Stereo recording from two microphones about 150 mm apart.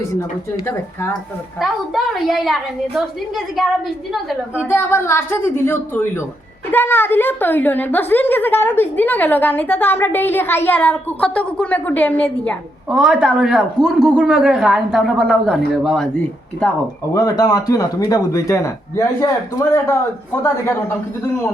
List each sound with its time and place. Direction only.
1.5 s a woman's voice: centre (ahead or behind)
4.6 s a woman's voice: 15° left (ahead or behind)
17.2 s a man's voice: 25° left (ahead or behind)